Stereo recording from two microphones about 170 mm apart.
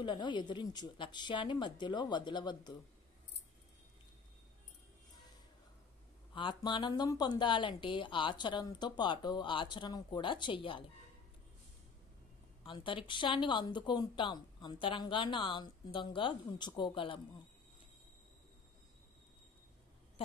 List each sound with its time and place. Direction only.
0.0 s speech: 25° left (ahead or behind)
6.3 s speech: 30° left (ahead or behind)
12.6 s speech: 30° left (ahead or behind)